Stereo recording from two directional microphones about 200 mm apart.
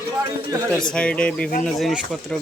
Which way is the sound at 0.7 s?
5° left (ahead or behind).